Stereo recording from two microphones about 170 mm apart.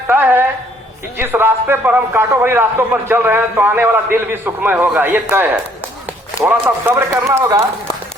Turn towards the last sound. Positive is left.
turn(degrees=-15)  # may be behind; listen again after turning